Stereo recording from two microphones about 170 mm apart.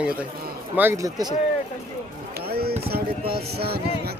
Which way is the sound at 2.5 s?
65° right (ahead or behind).